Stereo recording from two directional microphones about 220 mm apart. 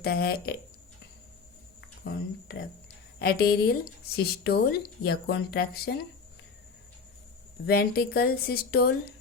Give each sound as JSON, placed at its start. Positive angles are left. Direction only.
{"t": 0.0, "sound": "speech", "side_deg": 45}
{"t": 3.2, "sound": "speech", "side_deg": 45}
{"t": 7.7, "sound": "speech", "side_deg": 45}